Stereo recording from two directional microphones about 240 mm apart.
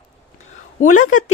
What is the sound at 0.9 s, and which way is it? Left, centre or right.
Speech, left.